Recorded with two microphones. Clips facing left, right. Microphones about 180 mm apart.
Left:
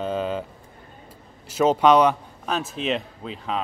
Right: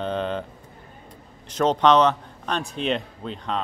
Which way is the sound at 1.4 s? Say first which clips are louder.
Left 1 dB; 5° left (ahead or behind).